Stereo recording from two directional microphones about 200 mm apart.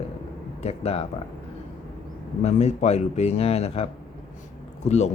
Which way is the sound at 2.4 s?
35° left (ahead or behind).